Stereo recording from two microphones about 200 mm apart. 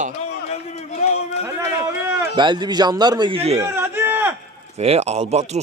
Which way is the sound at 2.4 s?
20° right (ahead or behind).